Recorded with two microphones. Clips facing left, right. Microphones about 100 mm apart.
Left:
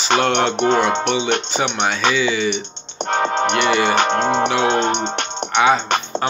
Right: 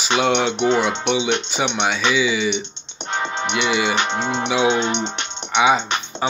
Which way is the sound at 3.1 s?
50° left (ahead or behind).